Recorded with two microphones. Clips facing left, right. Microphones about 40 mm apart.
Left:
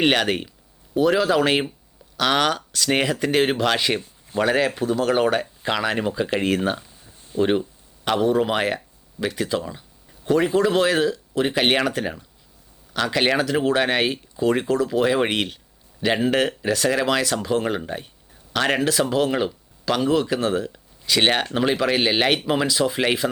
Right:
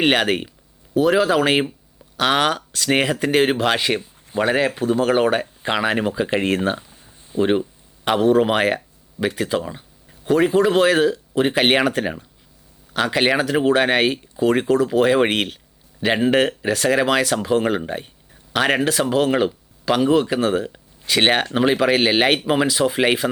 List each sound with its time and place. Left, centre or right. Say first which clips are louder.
0.0 s speech: right 2 dB; right
6.9 s a sound: right 2 dB; right
7.4 s a sound: right 2 dB; centre
8.2 s speech: right 4 dB; right
16.0 s speech: right 3 dB; centre
16.7 s speech: right 3 dB; right
23.2 s speech: right 2 dB; centre